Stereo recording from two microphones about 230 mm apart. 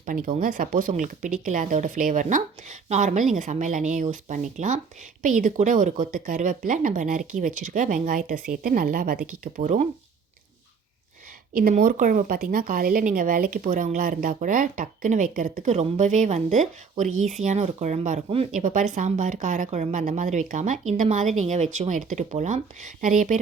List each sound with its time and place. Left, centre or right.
0.0 s speech: right
11.5 s speech: right